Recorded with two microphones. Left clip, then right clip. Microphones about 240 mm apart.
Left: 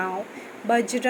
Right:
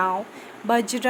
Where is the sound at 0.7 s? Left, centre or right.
Centre.